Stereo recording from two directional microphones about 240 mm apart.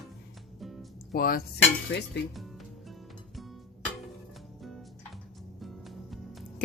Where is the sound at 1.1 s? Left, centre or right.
Left.